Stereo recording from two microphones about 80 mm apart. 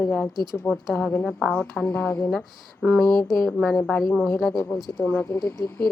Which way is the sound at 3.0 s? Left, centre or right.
Centre.